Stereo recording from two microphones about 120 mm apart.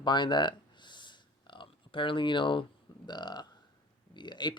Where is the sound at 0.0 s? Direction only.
40° left (ahead or behind).